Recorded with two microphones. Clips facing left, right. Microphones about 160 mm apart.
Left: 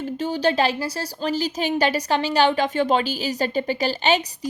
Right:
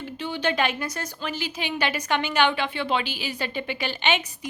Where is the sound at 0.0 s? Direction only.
40° left (ahead or behind).